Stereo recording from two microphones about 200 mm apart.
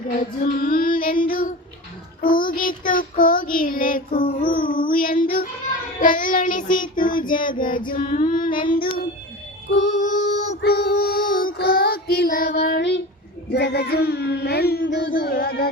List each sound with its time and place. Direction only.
0.4 s child singing: 45° left (ahead or behind)
8.4 s child singing: 25° left (ahead or behind)
9.6 s music: 60° left (ahead or behind)
9.9 s music: 40° left (ahead or behind)
10.2 s female singing: 60° left (ahead or behind)
10.6 s child singing: 50° left (ahead or behind)